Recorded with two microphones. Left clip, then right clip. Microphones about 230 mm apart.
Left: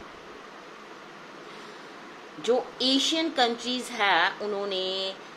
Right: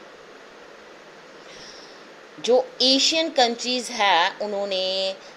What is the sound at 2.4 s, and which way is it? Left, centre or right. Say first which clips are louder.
A woman's voice: right 6 dB; centre.